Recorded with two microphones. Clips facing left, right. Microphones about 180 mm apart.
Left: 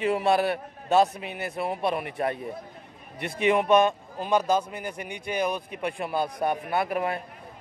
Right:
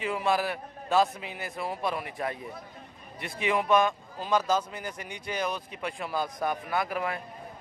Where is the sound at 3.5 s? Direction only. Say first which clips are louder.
Left 3 dB; 20° left (ahead or behind).